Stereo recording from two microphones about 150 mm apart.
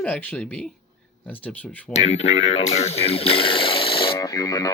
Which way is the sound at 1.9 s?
45° left (ahead or behind).